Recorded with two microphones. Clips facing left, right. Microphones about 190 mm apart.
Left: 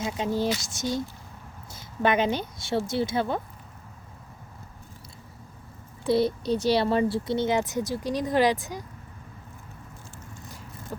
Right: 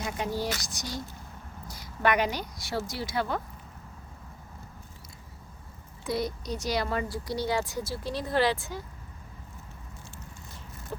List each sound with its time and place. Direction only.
0.0 s speech: 20° left (ahead or behind)
6.1 s speech: 30° left (ahead or behind)